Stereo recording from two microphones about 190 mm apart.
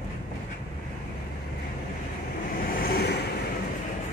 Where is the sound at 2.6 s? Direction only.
50° left (ahead or behind).